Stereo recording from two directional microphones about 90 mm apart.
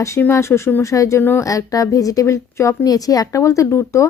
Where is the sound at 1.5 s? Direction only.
40° left (ahead or behind).